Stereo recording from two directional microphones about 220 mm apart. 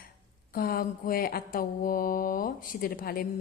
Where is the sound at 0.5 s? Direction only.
40° left (ahead or behind).